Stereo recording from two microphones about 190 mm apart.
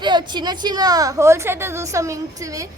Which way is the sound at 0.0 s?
25° right (ahead or behind).